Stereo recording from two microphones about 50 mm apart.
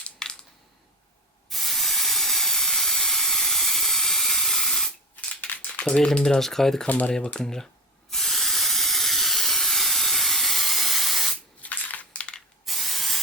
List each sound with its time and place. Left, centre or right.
0.0 s a sound: centre
1.5 s steam: centre
5.1 s a sound: left
5.9 s speech: centre
6.8 s speech: left
7.3 s speech: centre
8.1 s steam: centre
11.6 s crushing: left
12.6 s spray: centre